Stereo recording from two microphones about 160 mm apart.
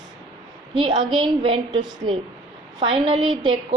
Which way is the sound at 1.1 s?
30° right (ahead or behind).